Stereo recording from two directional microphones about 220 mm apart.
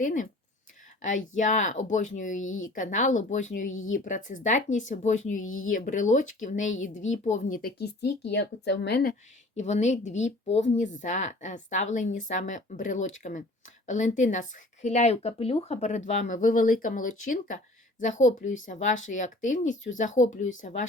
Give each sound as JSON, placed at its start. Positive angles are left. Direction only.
{"t": 0.0, "sound": "a woman's voice", "side_deg": 35}
{"t": 1.4, "sound": "a woman's voice", "side_deg": 35}
{"t": 2.4, "sound": "speech", "side_deg": 65}
{"t": 2.6, "sound": "a woman's voice", "side_deg": 35}
{"t": 9.6, "sound": "a woman's voice", "side_deg": 30}